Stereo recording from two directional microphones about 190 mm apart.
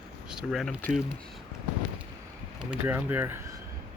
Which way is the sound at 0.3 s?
Centre (ahead or behind).